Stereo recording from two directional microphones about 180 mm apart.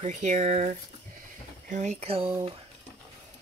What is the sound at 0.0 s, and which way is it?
Speech, 45° right (ahead or behind).